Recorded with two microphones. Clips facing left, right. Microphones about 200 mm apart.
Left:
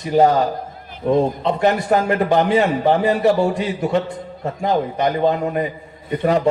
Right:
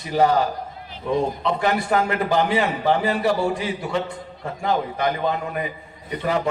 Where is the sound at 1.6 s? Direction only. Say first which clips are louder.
Left 5 dB; 40° left (ahead or behind).